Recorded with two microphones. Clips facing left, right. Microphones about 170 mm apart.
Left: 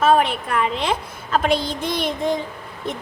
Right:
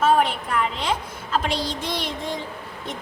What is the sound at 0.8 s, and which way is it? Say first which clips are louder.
A child's voice: left 3 dB; 60° left (ahead or behind).